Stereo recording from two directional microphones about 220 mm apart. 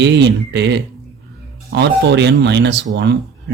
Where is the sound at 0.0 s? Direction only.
50° right (ahead or behind).